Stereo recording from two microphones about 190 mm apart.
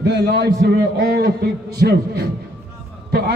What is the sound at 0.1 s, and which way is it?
A man's voice, 60° right (ahead or behind).